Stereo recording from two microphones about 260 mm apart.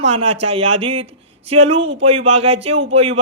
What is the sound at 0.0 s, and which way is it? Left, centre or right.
Speech, right.